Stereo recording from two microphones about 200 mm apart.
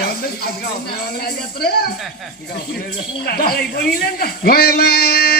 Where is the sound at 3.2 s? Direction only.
50° left (ahead or behind).